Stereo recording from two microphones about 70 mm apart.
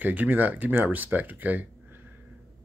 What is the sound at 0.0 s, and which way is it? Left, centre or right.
A man's voice, right.